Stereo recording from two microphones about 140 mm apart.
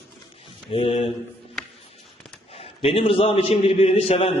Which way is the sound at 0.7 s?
40° left (ahead or behind).